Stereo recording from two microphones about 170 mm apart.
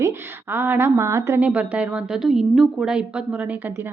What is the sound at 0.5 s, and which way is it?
Speech, 10° right (ahead or behind).